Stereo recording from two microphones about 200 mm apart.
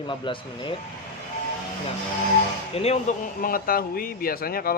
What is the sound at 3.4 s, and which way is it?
Speech, 45° left (ahead or behind).